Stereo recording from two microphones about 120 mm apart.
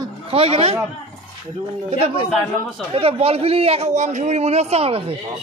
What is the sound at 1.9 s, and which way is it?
A man's voice, 55° right (ahead or behind).